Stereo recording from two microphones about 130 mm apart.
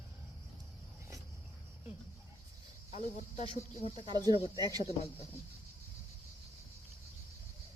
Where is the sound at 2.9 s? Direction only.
70° left (ahead or behind).